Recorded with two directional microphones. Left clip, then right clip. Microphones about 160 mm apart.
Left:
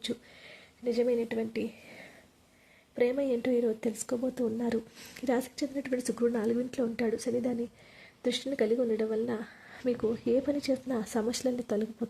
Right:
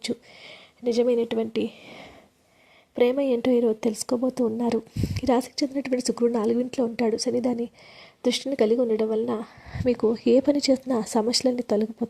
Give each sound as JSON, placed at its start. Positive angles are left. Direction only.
{"t": 0.0, "sound": "a woman's voice", "side_deg": -45}